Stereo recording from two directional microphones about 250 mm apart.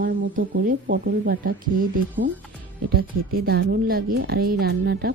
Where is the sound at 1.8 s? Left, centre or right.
Right.